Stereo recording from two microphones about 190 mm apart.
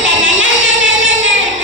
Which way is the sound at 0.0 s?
80° right.